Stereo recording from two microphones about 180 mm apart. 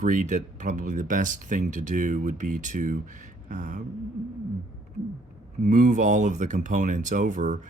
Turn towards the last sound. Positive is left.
turn(degrees=-45)  # may be behind; listen again after turning